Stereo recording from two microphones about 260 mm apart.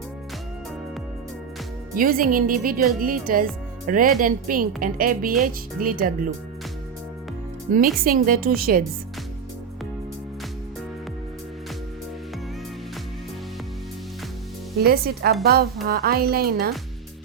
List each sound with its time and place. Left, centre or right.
2.0 s speech: right
7.9 s speech: right
14.8 s speech: right